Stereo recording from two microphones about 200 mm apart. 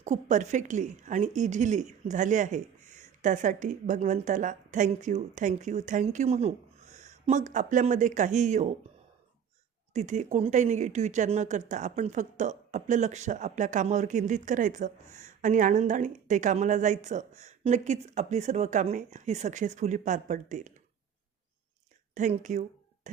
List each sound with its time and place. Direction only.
0.0 s speech: 35° right (ahead or behind)
9.9 s speech: 35° right (ahead or behind)
22.1 s speech: 40° right (ahead or behind)
23.1 s music: 40° right (ahead or behind)